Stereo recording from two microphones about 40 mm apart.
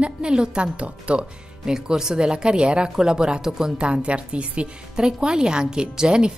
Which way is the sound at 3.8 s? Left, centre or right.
Right.